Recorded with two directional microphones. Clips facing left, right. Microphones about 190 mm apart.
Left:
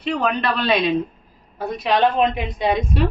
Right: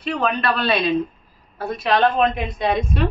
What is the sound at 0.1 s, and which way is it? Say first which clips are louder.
A woman's voice: even; 15° left (ahead or behind).